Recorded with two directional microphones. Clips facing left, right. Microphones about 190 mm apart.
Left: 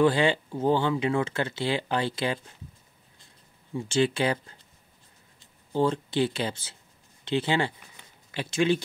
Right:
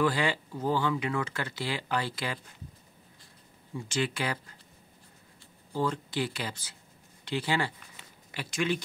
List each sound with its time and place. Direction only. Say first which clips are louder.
0.0 s speech: left 6 dB; 25° left (ahead or behind)
3.7 s speech: left 7 dB; 25° left (ahead or behind)